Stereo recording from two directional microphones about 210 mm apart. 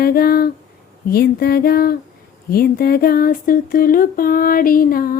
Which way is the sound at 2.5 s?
45° left (ahead or behind).